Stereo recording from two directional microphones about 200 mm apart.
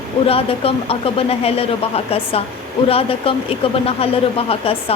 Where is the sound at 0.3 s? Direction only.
30° left (ahead or behind).